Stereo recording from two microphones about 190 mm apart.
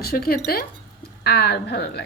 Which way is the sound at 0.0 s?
50° left (ahead or behind).